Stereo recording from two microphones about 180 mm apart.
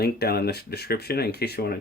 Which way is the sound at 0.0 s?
60° left (ahead or behind).